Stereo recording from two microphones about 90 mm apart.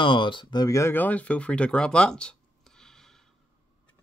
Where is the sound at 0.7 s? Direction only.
35° left (ahead or behind).